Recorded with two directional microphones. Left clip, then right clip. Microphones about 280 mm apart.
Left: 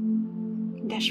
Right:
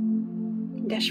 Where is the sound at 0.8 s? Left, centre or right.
Centre.